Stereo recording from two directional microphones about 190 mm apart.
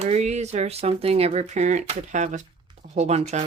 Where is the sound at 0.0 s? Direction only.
35° right (ahead or behind).